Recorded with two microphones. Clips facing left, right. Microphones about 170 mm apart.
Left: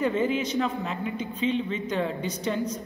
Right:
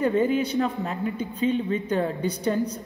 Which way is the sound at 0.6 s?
40° right (ahead or behind).